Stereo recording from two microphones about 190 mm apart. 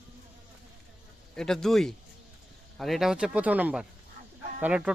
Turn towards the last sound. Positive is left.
turn(degrees=-5)  # may be behind; listen again after turning